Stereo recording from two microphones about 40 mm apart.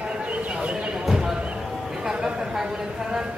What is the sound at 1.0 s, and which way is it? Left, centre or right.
Clip-clop, centre.